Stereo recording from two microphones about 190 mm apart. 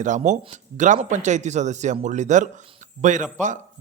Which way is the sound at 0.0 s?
40° right (ahead or behind).